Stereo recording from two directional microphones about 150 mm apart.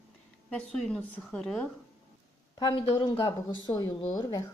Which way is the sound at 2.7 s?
35° left (ahead or behind).